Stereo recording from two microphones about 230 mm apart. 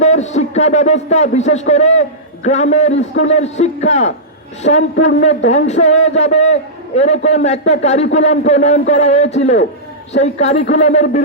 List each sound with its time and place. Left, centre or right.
0.0 s a man's voice: left